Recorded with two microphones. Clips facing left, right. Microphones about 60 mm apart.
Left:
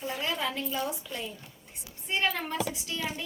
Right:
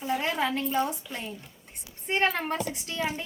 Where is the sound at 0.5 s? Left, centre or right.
Right.